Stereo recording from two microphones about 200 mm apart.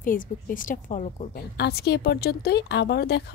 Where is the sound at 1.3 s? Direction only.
55° left (ahead or behind).